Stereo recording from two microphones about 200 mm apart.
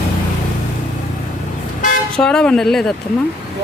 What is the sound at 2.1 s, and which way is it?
Speech, 5° left (ahead or behind).